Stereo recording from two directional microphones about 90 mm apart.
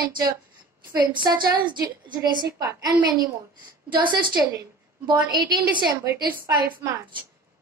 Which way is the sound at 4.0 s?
60° right (ahead or behind).